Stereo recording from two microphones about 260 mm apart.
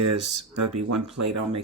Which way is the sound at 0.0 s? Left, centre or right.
Right.